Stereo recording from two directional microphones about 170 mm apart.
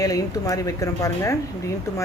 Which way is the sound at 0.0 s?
20° left (ahead or behind).